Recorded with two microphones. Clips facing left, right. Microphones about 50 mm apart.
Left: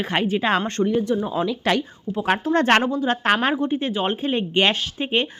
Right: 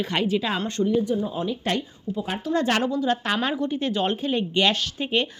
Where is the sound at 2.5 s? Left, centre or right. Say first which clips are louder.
Left 3 dB; left.